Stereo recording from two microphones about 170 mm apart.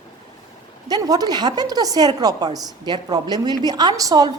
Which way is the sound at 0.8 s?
25° right (ahead or behind).